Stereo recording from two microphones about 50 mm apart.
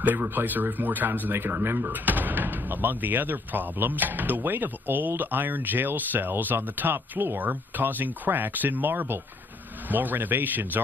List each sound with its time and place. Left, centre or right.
0.0 s speech: right